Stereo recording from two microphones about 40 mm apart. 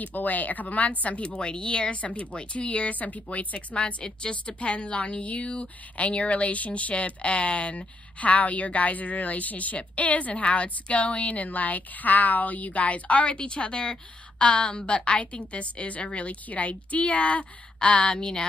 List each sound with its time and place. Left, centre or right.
0.0 s a woman's voice: left
2.9 s a woman's voice: left